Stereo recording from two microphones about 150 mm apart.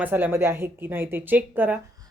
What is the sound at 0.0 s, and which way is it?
A woman's voice, 15° right (ahead or behind).